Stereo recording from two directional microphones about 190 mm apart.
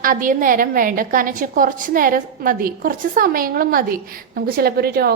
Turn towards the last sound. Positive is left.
turn(degrees=-55)  # may be behind; listen again after turning